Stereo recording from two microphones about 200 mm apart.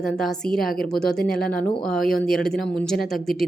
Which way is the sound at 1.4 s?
45° left (ahead or behind).